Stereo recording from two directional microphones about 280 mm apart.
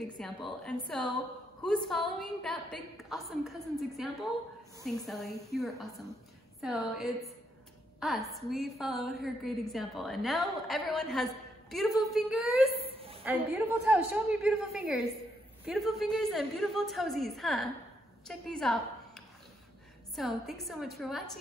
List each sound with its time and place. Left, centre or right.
0.2 s a woman's voice: centre
12.7 s a sound: right
13.2 s a woman's voice: centre